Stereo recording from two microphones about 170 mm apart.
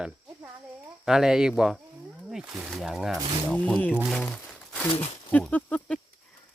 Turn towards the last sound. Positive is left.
turn(degrees=5)  # may be behind; listen again after turning